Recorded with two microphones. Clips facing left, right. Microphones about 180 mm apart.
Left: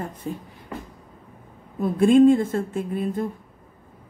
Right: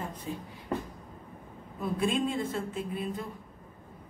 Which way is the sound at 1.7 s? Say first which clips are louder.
Left 13 dB; 50° left (ahead or behind).